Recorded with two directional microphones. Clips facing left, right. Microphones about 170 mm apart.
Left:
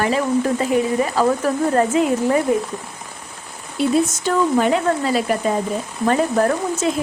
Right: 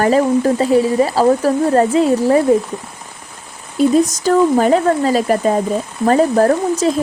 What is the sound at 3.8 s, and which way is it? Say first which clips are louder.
Speech: right 5 dB; 40° right (ahead or behind).